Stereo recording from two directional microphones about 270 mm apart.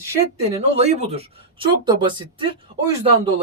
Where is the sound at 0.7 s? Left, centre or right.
Right.